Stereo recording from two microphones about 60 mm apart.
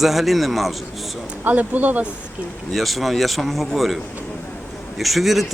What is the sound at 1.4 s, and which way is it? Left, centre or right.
Speech, right.